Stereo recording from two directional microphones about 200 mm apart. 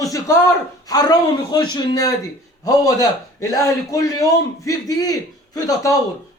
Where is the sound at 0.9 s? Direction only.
20° left (ahead or behind).